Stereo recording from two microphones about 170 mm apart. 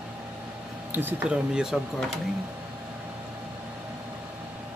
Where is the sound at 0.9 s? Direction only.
10° right (ahead or behind).